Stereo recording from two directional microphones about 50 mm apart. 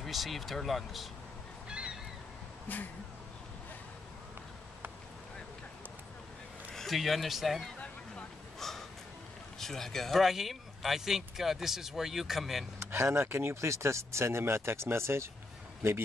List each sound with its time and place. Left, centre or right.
0.0 s speech: centre
1.7 s honk: centre
2.7 s speech: left
6.7 s speech: centre
8.5 s a sound: centre
9.6 s speech: centre
10.2 s speech: centre
12.7 s speech: right